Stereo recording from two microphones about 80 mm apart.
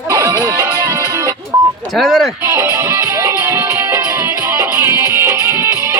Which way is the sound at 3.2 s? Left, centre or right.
Right.